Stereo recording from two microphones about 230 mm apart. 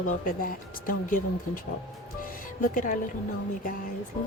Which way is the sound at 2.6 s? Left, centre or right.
Left.